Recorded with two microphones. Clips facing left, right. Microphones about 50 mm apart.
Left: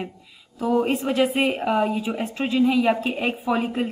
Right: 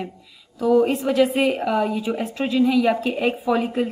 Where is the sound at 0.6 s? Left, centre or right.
Centre.